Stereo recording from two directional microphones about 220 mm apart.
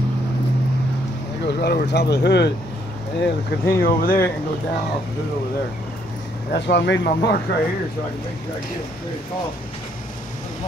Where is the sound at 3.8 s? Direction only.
40° left (ahead or behind).